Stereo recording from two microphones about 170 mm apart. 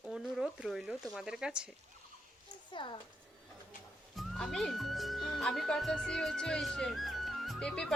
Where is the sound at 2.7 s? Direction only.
30° left (ahead or behind).